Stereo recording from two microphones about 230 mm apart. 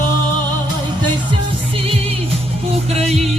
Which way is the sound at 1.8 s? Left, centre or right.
Right.